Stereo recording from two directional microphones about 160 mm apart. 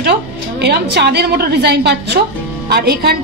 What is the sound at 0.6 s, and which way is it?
A woman's voice, 90° right.